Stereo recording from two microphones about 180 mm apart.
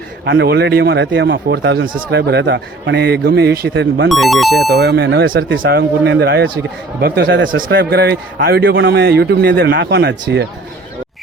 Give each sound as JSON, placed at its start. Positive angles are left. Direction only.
{"t": 0.3, "sound": "a man's voice", "side_deg": -70}
{"t": 4.1, "sound": "speech", "side_deg": 0}
{"t": 4.7, "sound": "a man's voice", "side_deg": -65}
{"t": 7.6, "sound": "a man's voice", "side_deg": -60}